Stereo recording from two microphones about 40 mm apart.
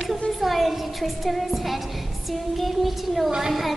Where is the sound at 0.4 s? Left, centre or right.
Centre.